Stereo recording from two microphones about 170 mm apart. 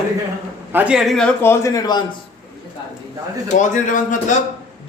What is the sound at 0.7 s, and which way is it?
Speech, 10° right (ahead or behind).